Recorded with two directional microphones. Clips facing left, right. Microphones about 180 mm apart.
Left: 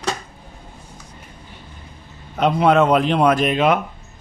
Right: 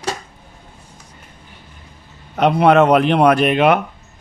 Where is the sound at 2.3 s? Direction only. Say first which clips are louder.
Right 3 dB; 65° right (ahead or behind).